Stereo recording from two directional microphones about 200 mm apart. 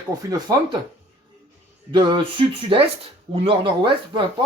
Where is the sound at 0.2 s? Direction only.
20° right (ahead or behind).